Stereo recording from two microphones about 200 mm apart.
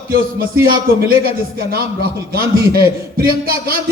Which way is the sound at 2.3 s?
50° right (ahead or behind).